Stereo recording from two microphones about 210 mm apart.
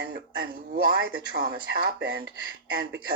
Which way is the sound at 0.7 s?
45° right (ahead or behind).